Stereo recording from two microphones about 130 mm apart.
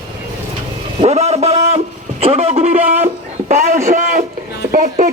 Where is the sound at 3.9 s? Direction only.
80° right.